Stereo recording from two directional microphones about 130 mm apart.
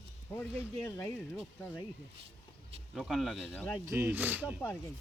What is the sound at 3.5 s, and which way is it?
Speech, 15° left (ahead or behind).